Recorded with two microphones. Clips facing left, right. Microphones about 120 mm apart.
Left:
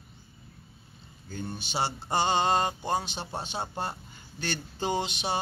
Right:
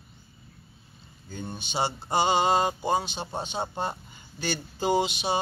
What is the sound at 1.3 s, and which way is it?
Mantra, 20° right (ahead or behind).